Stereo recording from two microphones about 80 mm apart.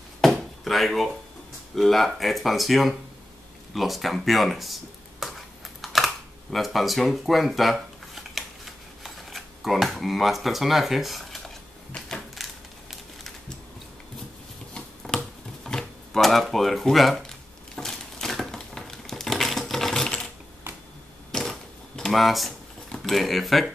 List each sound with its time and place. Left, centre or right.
0.2 s drawer open or close: centre
1.8 s speech: centre
5.2 s a sound: centre
5.8 s camera: centre
12.4 s a sound: centre
14.7 s a sound: centre
20.7 s finger snapping: right
21.3 s typewriter: centre
22.8 s speech: centre